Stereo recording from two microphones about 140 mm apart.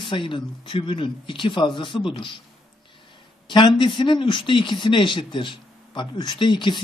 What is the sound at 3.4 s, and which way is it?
Speech, 35° left (ahead or behind).